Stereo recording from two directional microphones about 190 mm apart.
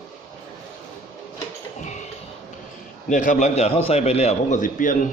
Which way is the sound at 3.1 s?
45° left (ahead or behind).